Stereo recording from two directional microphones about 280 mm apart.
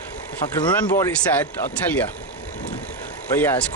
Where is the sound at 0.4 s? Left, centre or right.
Centre.